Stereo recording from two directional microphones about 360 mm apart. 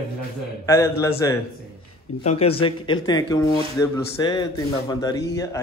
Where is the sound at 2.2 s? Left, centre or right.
Centre.